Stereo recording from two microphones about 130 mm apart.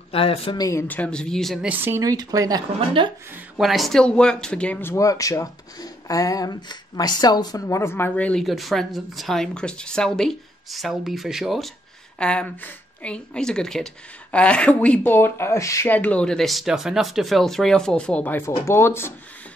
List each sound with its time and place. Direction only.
0.1 s speech: 45° left (ahead or behind)
0.6 s speech: 25° left (ahead or behind)
0.8 s speech: 10° left (ahead or behind)
1.7 s speech: 20° right (ahead or behind)
3.3 s speech: centre (ahead or behind); by 19.1 s 20° left (ahead or behind)